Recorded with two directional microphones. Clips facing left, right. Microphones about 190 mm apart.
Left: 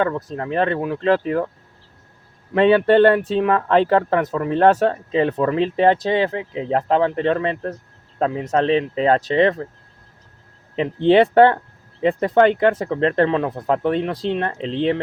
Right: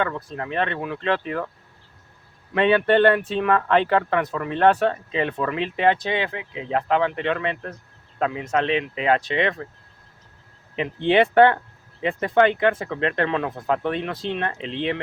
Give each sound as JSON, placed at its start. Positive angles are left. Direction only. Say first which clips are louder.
{"t": 0.2, "sound": "speech", "louder": "left 5 dB", "side_deg": 40}
{"t": 2.5, "sound": "speech", "louder": "left 4 dB", "side_deg": 35}
{"t": 10.8, "sound": "speech", "louder": "left 5 dB", "side_deg": 35}